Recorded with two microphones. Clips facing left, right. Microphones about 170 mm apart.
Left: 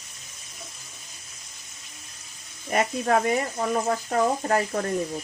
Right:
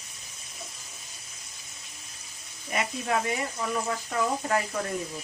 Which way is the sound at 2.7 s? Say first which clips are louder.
Left 6 dB; 50° left (ahead or behind).